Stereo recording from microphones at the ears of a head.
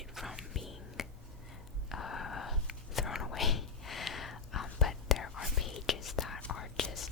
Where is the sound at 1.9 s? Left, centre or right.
Left.